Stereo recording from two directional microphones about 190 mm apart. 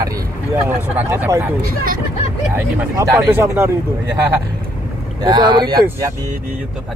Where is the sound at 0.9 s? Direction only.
10° right (ahead or behind).